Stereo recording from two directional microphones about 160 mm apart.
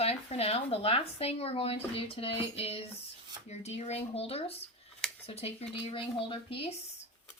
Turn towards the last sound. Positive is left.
turn(degrees=35)  # may be behind; listen again after turning